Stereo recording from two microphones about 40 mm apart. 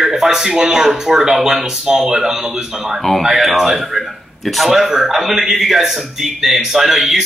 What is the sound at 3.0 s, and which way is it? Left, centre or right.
Speech, centre.